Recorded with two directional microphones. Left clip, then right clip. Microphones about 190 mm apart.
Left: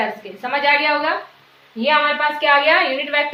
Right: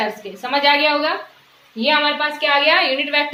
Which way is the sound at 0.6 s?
30° right (ahead or behind).